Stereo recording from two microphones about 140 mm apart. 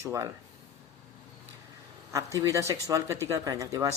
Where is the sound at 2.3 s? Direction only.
20° right (ahead or behind).